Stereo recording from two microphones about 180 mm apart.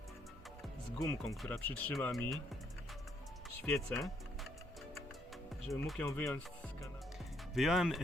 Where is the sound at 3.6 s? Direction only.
5° left (ahead or behind).